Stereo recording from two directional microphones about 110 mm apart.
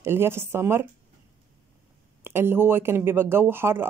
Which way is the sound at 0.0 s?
20° right (ahead or behind).